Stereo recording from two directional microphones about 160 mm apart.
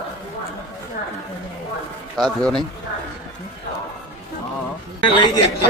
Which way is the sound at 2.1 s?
5° left (ahead or behind).